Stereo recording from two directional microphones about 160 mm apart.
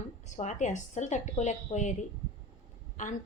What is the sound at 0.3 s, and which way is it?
A woman's voice, 50° left (ahead or behind).